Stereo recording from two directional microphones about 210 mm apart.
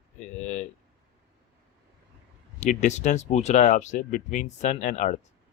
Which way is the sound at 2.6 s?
35° left (ahead or behind).